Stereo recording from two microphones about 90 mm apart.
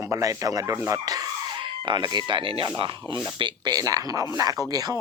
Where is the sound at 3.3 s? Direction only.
60° right (ahead or behind); by 4.5 s 40° right (ahead or behind).